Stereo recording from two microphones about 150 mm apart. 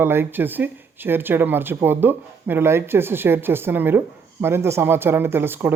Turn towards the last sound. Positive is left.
turn(degrees=-15)  # may be behind; listen again after turning